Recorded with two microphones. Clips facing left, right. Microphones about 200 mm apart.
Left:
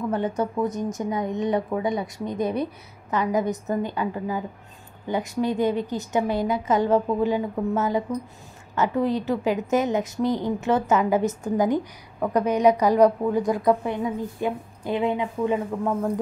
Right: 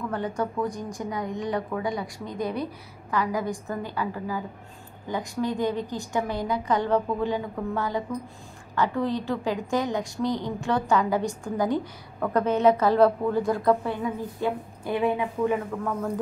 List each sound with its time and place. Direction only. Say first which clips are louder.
0.1 s a woman's voice: left 3 dB; 20° left (ahead or behind)